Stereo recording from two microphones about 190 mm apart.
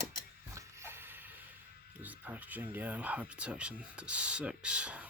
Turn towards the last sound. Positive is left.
turn(degrees=-5)  # may be behind; listen again after turning